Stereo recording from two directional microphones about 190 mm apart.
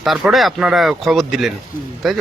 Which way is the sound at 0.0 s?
Centre (ahead or behind).